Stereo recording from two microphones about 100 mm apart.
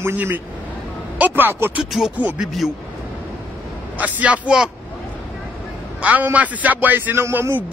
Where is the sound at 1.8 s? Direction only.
5° right (ahead or behind).